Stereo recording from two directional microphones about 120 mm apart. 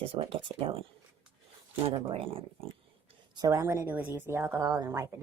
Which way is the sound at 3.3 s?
25° right (ahead or behind).